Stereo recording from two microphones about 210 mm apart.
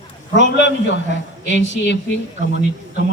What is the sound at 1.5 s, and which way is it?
Speech, 60° left (ahead or behind).